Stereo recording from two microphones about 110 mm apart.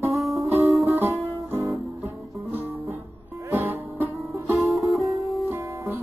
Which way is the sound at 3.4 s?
20° right (ahead or behind).